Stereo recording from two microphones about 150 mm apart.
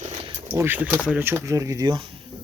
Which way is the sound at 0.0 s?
35° right (ahead or behind).